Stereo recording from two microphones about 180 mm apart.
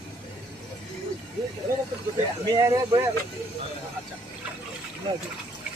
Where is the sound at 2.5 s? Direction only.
15° right (ahead or behind).